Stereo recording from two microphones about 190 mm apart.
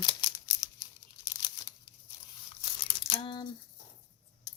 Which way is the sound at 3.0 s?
25° left (ahead or behind).